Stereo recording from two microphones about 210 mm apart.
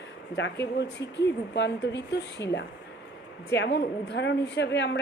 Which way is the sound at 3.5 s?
55° left (ahead or behind).